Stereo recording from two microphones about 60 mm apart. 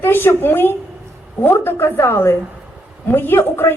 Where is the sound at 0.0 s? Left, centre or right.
Left.